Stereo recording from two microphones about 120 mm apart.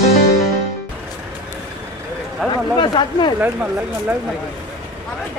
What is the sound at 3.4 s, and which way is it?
Speech, 15° right (ahead or behind).